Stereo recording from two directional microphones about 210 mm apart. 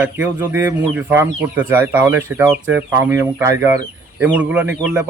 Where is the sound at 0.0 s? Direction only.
10° right (ahead or behind).